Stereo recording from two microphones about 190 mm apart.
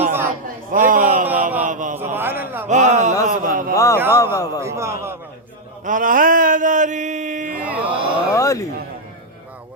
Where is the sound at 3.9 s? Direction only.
10° right (ahead or behind).